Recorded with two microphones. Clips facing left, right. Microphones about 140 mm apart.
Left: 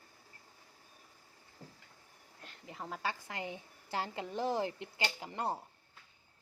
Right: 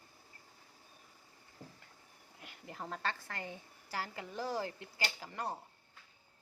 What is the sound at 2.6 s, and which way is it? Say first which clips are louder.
A woman's voice: left 1 dB; centre (ahead or behind).